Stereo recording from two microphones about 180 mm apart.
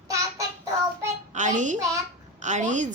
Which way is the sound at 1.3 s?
40° right (ahead or behind).